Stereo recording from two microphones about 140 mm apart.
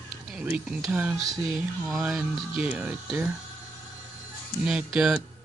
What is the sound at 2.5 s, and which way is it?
Speech, 10° right (ahead or behind).